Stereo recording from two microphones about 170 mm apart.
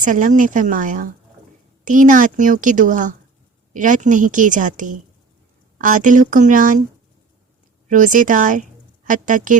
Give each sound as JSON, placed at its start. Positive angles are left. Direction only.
{"t": 0.0, "sound": "a woman's voice", "side_deg": -50}
{"t": 7.9, "sound": "a woman's voice", "side_deg": -50}